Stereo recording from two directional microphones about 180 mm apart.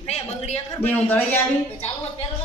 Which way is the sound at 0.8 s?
10° left (ahead or behind).